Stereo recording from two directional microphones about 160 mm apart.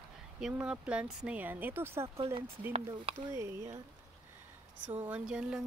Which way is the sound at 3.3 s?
20° right (ahead or behind).